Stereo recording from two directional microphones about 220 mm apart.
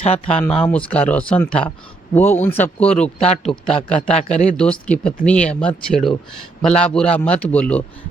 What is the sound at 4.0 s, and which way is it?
Speech, 30° left (ahead or behind).